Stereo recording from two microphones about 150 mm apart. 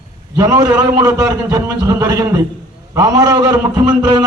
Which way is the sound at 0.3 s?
25° right (ahead or behind).